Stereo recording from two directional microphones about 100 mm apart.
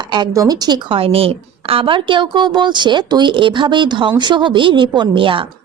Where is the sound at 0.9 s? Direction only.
70° right (ahead or behind).